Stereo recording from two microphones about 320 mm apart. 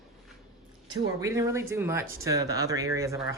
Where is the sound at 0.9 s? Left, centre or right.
Centre.